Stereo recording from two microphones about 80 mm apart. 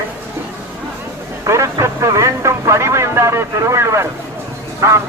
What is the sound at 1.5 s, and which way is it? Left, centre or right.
Speech, right.